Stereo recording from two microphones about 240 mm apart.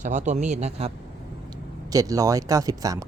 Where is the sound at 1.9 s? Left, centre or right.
Centre.